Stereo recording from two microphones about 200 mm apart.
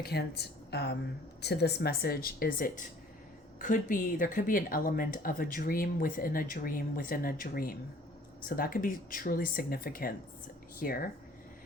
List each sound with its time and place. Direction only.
0.0 s a woman's voice: 55° left (ahead or behind)